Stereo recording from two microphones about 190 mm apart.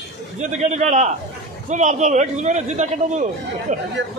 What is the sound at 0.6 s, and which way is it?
A man's voice, 35° right (ahead or behind).